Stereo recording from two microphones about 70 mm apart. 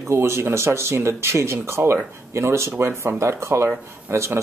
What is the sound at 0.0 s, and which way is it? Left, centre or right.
Speech, right.